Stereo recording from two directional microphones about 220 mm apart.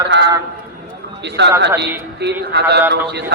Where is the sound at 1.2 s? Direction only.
50° right (ahead or behind).